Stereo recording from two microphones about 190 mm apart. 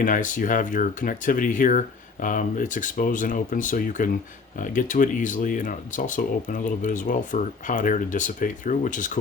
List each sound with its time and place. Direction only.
0.0 s speech: 45° left (ahead or behind)